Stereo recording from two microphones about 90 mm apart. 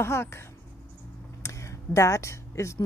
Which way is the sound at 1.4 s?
35° left (ahead or behind).